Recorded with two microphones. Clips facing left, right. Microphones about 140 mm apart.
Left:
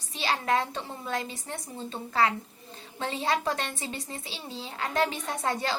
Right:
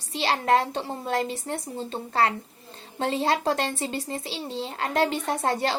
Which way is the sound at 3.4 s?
30° right (ahead or behind).